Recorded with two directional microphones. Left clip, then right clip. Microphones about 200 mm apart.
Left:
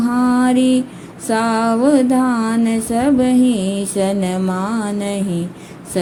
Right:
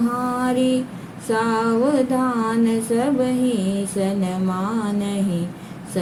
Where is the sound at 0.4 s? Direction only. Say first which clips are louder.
Left 5 dB; 45° left (ahead or behind).